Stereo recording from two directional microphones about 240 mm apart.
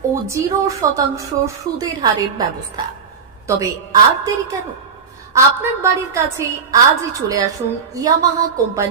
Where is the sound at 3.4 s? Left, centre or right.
Centre.